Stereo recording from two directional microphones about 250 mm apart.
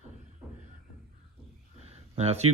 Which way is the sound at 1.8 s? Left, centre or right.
Right.